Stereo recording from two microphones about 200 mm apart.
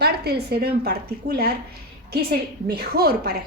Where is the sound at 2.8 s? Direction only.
50° right (ahead or behind).